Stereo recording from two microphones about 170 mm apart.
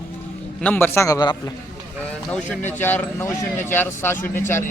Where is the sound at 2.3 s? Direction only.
5° left (ahead or behind).